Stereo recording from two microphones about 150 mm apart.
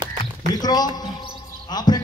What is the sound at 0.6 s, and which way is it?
Speech, 25° left (ahead or behind).